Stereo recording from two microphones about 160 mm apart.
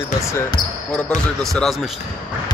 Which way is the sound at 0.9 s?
5° left (ahead or behind).